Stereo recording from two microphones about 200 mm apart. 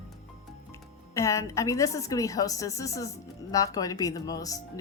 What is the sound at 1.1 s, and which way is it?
Speech, 15° left (ahead or behind).